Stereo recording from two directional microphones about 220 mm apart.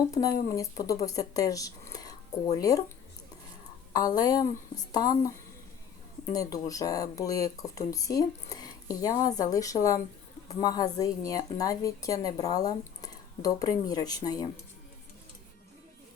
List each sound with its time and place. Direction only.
0.5 s a woman's voice: 15° left (ahead or behind)
3.9 s a woman's voice: 15° left (ahead or behind)